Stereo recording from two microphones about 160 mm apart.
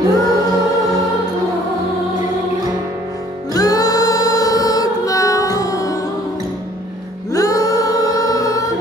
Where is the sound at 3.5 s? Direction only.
20° left (ahead or behind).